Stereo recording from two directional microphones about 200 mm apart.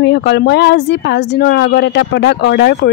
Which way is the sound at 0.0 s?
55° left (ahead or behind).